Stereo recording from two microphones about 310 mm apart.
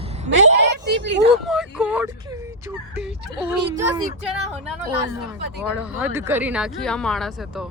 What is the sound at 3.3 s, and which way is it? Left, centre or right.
Speech, centre.